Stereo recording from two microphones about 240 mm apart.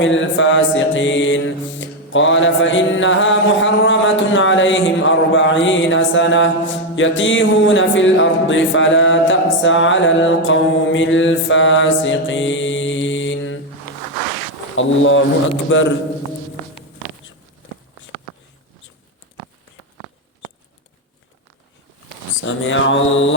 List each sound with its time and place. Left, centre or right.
0.0 s mantra: left
14.8 s mantra: left
22.4 s mantra: left